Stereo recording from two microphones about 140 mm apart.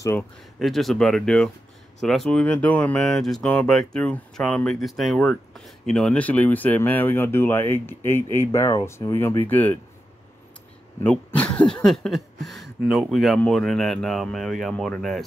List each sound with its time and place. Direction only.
0.0 s speech: 15° left (ahead or behind)
0.6 s speech: centre (ahead or behind)
11.0 s speech: 10° left (ahead or behind)